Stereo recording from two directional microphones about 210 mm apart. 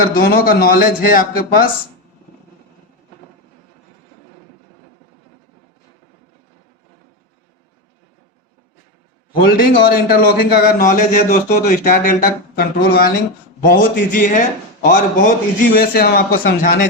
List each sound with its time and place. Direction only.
0.0 s a man's voice: 45° left (ahead or behind)
9.5 s a man's voice: 45° left (ahead or behind)